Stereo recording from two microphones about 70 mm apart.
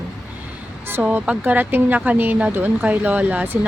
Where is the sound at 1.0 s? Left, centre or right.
Centre.